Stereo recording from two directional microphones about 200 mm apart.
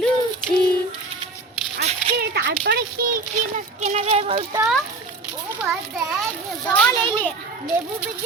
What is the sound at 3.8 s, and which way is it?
Speech, 30° right (ahead or behind).